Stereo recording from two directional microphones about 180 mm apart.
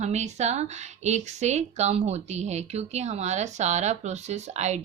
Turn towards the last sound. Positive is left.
turn(degrees=-40)  # may be behind; listen again after turning